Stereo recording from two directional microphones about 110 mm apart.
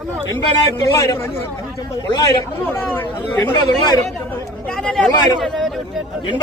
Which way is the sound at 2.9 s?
20° left (ahead or behind).